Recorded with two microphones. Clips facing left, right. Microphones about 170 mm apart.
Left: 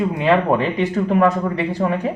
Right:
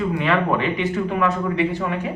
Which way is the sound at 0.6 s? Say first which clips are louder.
Left 3 dB; 40° left (ahead or behind).